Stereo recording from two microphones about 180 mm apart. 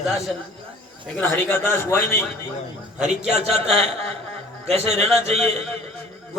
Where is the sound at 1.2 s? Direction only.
10° left (ahead or behind).